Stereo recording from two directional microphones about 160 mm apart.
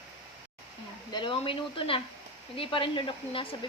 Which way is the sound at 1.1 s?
30° left (ahead or behind).